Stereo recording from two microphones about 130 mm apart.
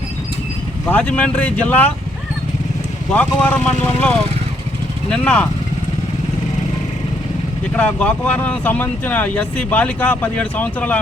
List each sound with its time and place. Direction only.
0.9 s speech: 10° left (ahead or behind)
3.1 s speech: 10° left (ahead or behind)
5.1 s speech: 10° left (ahead or behind)
7.8 s speech: 10° left (ahead or behind)